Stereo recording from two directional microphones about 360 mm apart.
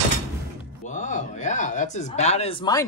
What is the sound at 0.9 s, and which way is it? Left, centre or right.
Speech, centre.